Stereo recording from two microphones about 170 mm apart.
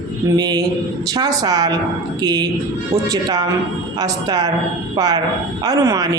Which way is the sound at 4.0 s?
20° right (ahead or behind).